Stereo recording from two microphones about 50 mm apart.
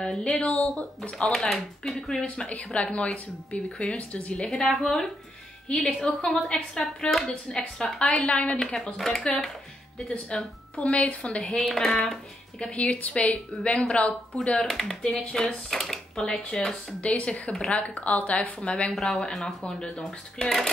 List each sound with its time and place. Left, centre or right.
0.0 s speech: centre
0.4 s speech: left
1.1 s speech: centre
2.2 s speech: left
4.4 s a woman's voice: centre
8.3 s speech: left
8.9 s a woman's voice: centre
10.0 s speech: centre
11.9 s a woman's voice: centre
12.5 s speech: left
14.7 s speech: centre
18.9 s a woman's voice: centre
19.6 s speech: centre